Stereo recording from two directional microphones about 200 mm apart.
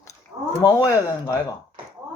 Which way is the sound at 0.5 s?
15° left (ahead or behind).